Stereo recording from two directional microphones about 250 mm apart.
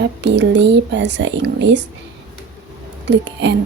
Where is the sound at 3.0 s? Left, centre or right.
Right.